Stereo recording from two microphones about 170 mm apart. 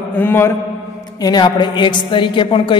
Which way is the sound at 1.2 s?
25° left (ahead or behind).